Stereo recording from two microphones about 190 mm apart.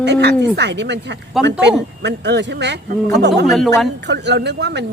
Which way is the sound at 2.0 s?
65° right (ahead or behind).